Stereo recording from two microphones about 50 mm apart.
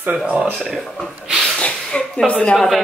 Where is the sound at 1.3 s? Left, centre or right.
Centre.